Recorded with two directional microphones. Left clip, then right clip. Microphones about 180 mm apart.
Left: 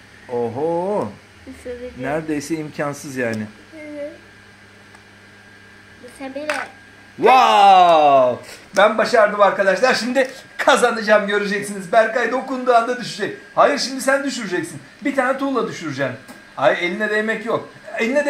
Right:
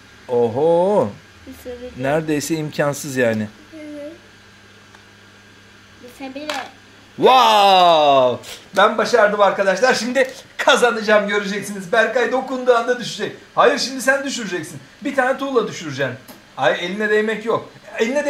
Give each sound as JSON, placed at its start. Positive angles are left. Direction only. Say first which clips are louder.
{"t": 0.3, "sound": "speech", "louder": "right 5 dB", "side_deg": -75}
{"t": 7.2, "sound": "speech", "louder": "even", "side_deg": -70}
{"t": 8.7, "sound": "a man's voice", "louder": "even", "side_deg": -30}